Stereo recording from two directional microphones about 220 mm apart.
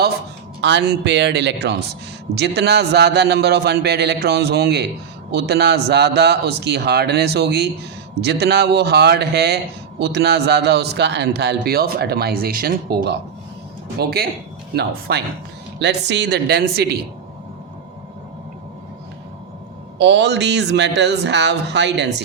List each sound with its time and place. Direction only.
0.6 s a man's voice: 50° right (ahead or behind)
20.0 s a man's voice: 50° right (ahead or behind)